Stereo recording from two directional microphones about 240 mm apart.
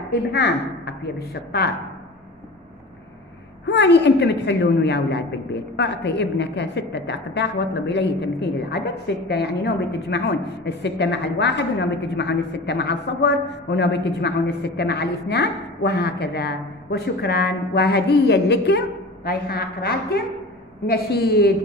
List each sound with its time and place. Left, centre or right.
0.1 s a woman's voice: left
3.6 s a woman's voice: left